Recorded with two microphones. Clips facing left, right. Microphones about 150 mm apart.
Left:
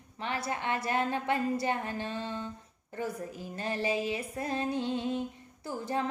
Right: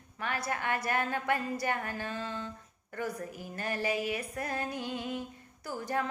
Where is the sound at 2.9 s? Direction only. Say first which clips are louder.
Left 1 dB; 25° left (ahead or behind).